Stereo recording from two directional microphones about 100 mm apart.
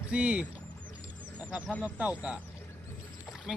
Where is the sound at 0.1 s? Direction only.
10° right (ahead or behind).